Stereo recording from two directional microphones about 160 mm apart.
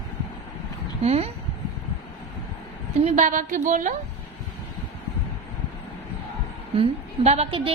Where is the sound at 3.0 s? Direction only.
50° right (ahead or behind).